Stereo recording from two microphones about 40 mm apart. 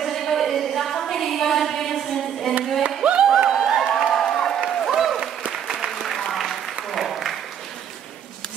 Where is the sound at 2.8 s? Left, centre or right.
Right.